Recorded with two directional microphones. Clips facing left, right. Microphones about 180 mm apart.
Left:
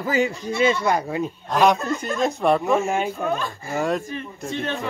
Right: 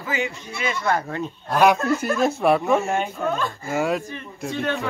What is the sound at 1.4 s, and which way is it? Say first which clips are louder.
A man's voice: right 1 dB; centre (ahead or behind).